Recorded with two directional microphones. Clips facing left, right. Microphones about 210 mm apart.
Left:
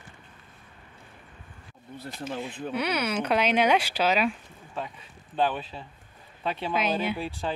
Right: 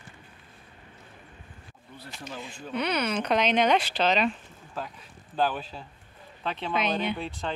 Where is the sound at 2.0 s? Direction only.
50° left (ahead or behind).